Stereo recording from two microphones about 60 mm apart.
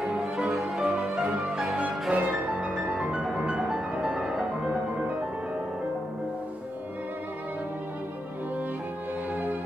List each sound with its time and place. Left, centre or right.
0.5 s music: centre
1.8 s music: right